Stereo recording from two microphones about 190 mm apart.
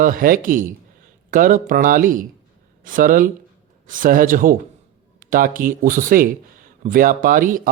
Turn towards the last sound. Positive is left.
turn(degrees=-45)  # may be behind; listen again after turning